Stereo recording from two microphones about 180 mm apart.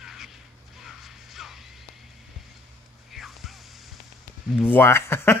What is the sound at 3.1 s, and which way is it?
Music, centre (ahead or behind).